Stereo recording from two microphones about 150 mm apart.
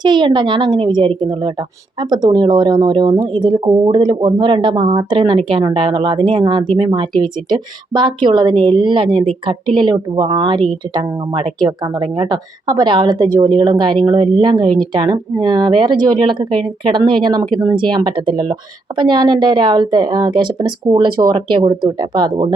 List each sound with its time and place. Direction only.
0.0 s speech: 30° right (ahead or behind)